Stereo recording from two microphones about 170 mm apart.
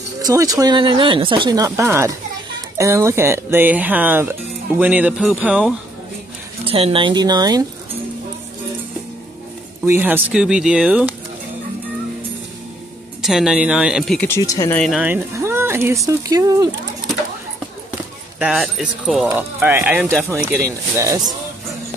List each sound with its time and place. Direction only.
0.2 s speech: 20° right (ahead or behind)
6.6 s speech: 35° right (ahead or behind)
9.8 s speech: 10° right (ahead or behind)
13.2 s speech: centre (ahead or behind)
14.3 s speech: 20° left (ahead or behind)
15.0 s speech: 10° right (ahead or behind)
18.4 s speech: 5° right (ahead or behind)